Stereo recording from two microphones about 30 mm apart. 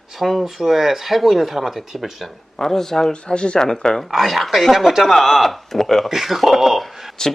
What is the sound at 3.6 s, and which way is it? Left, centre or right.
Speech, left.